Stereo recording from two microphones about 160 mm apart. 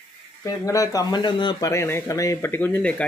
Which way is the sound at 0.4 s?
20° left (ahead or behind).